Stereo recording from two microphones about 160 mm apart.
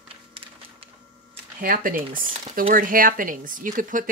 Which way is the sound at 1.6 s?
60° right (ahead or behind).